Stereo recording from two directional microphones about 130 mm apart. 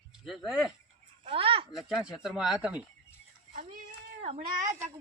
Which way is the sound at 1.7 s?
Centre (ahead or behind).